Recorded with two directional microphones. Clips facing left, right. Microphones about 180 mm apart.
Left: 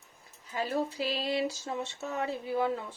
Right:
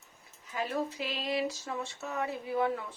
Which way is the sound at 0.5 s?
35° left (ahead or behind).